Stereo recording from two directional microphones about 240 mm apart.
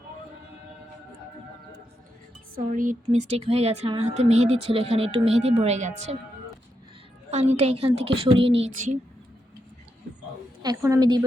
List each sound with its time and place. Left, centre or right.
2.6 s speech: right
7.3 s speech: right
10.6 s a woman's voice: centre